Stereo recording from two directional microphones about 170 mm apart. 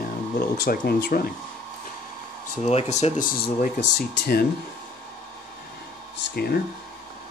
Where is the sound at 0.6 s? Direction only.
60° left (ahead or behind).